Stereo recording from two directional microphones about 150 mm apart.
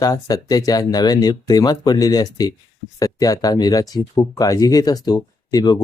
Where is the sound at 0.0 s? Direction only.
25° left (ahead or behind).